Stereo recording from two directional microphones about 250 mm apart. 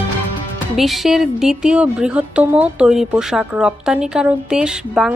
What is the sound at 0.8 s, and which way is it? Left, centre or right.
Speech, centre.